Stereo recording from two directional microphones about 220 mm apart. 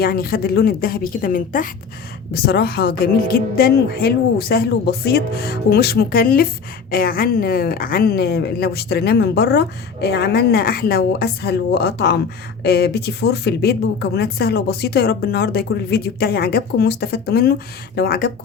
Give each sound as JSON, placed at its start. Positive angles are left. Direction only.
{"t": 0.0, "sound": "speech", "side_deg": 45}